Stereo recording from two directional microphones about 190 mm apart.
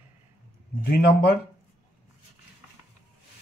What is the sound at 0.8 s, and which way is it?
Speech, 50° left (ahead or behind).